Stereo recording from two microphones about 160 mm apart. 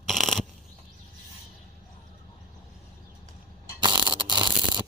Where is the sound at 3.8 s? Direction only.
30° right (ahead or behind).